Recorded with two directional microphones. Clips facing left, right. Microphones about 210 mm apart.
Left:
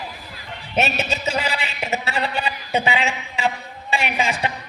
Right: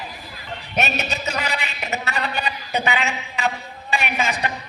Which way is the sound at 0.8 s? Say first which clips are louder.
Left 2 dB; 30° left (ahead or behind).